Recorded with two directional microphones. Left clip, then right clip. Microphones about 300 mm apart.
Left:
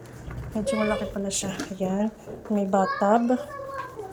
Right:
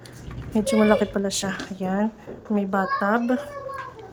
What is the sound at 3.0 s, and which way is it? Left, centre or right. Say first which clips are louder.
Speech: left 1 dB; centre.